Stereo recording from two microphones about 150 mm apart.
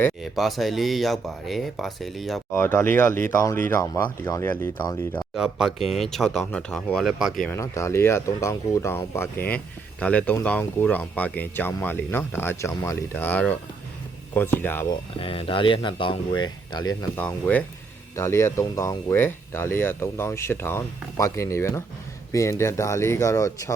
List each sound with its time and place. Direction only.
0.3 s speech: centre (ahead or behind)
2.5 s speech: 15° left (ahead or behind)
5.3 s speech: centre (ahead or behind)
7.4 s speech: 20° left (ahead or behind)
14.8 s speech: 35° left (ahead or behind)
17.2 s speech: 10° left (ahead or behind)